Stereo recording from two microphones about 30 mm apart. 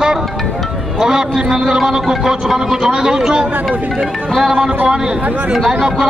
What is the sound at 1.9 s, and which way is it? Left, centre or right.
Speech, right.